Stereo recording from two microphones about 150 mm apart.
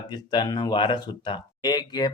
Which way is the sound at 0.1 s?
30° left (ahead or behind).